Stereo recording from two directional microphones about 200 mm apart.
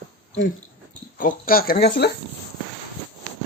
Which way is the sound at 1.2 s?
45° left (ahead or behind).